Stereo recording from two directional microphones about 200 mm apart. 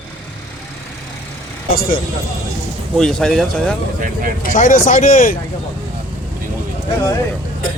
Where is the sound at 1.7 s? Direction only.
45° left (ahead or behind).